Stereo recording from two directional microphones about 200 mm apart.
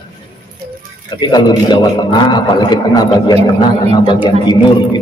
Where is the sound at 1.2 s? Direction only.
20° left (ahead or behind).